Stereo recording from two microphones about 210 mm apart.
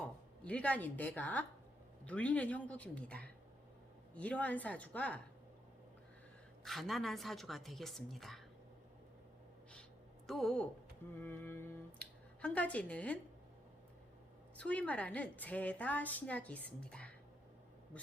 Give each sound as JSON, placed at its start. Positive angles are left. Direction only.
{"t": 0.0, "sound": "a woman's voice", "side_deg": 5}
{"t": 6.7, "sound": "a woman's voice", "side_deg": 0}
{"t": 10.2, "sound": "a woman's voice", "side_deg": 0}
{"t": 14.5, "sound": "a woman's voice", "side_deg": 5}